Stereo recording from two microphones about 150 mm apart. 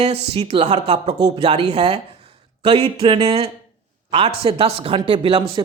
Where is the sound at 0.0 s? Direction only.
40° right (ahead or behind).